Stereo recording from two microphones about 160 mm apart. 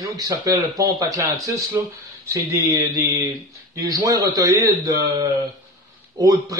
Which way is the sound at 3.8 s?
20° right (ahead or behind).